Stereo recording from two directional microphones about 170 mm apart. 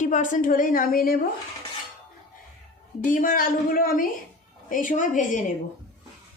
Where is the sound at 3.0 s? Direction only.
50° left (ahead or behind).